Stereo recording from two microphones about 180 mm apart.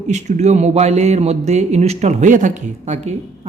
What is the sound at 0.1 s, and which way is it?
A man's voice, 40° right (ahead or behind).